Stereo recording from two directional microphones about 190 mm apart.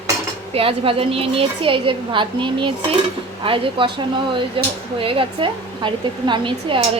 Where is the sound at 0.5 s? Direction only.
30° right (ahead or behind).